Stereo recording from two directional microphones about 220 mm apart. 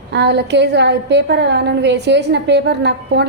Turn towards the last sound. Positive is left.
turn(degrees=-50)  # may be behind; listen again after turning